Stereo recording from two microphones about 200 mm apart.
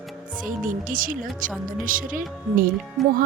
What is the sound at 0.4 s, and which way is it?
Speech, 45° right (ahead or behind).